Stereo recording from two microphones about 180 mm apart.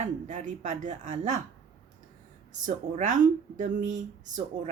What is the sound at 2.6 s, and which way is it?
A woman's voice, 45° right (ahead or behind).